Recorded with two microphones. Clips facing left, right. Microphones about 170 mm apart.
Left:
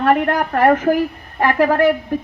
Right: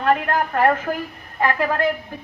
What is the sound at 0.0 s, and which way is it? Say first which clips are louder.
A woman's voice: left 4 dB; 60° left (ahead or behind).